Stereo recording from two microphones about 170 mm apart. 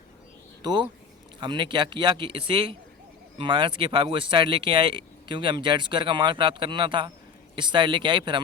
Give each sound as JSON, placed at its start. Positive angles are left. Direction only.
{"t": 0.6, "sound": "speech", "side_deg": -25}